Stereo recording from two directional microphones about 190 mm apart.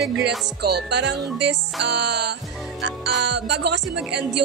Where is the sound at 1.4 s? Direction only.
65° right (ahead or behind).